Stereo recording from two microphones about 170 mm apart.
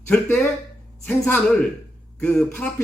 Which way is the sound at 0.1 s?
5° left (ahead or behind).